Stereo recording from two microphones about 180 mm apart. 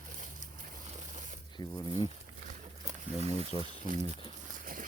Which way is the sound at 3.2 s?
35° right (ahead or behind).